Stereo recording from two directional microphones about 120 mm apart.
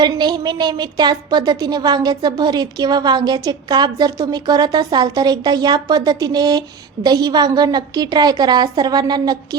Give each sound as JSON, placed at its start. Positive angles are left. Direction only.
{"t": 0.0, "sound": "a woman's voice", "side_deg": -35}